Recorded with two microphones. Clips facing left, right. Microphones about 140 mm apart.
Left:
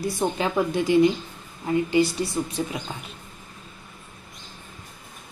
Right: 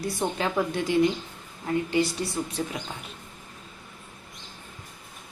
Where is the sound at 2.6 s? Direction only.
10° left (ahead or behind).